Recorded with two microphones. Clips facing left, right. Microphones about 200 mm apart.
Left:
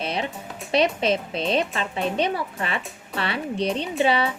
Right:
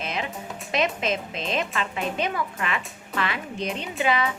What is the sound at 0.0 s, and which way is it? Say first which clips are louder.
Speech: left 3 dB; 35° left (ahead or behind).